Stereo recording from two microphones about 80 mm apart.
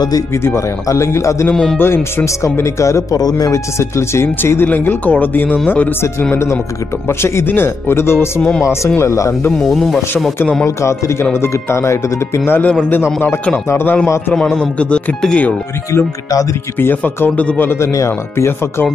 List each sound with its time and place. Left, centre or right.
0.8 s speech: left
1.5 s speech: centre
1.8 s speech: left
3.2 s speech: left
3.5 s speech: left
6.3 s speech: left
8.4 s speech: centre
8.6 s speech: left
9.7 s speech: centre
11.4 s speech: left
12.4 s speech: left
14.6 s speech: centre
16.8 s speech: left
17.7 s speech: left